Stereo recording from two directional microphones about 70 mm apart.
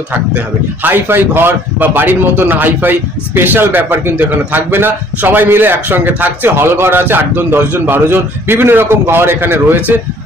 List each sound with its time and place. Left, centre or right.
0.8 s a man's voice: right